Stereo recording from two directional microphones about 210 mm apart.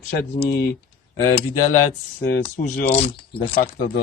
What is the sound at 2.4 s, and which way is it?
Speech, 35° left (ahead or behind).